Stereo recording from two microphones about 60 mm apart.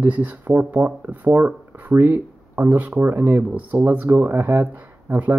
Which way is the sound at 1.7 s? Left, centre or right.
Right.